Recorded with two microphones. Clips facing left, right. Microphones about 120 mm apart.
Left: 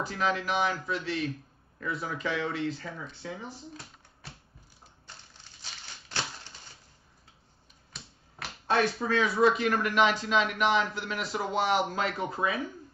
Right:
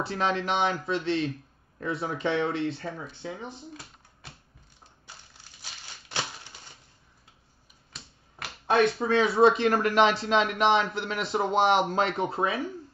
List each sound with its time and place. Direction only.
0.0 s speech: 30° right (ahead or behind)
5.6 s typewriter: 15° right (ahead or behind)
8.6 s speech: 20° right (ahead or behind)